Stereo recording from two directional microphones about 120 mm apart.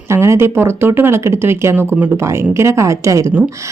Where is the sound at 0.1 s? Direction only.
20° right (ahead or behind).